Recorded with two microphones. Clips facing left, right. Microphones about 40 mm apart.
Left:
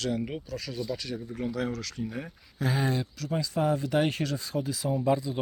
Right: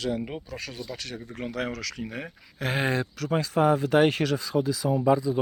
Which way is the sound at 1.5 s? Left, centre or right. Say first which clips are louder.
Right 1 dB; right.